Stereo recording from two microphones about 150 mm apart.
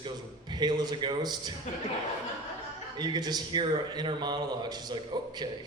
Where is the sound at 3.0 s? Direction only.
30° right (ahead or behind).